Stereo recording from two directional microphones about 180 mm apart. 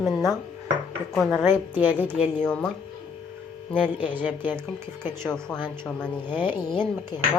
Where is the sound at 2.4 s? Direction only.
5° left (ahead or behind).